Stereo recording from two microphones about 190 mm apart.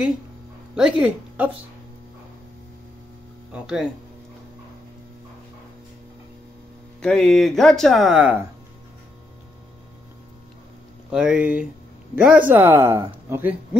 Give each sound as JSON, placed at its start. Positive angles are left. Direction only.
{"t": 0.7, "sound": "a woman's voice", "side_deg": -5}
{"t": 3.5, "sound": "speech", "side_deg": -5}
{"t": 7.0, "sound": "speech", "side_deg": 5}
{"t": 11.1, "sound": "a woman's voice", "side_deg": -5}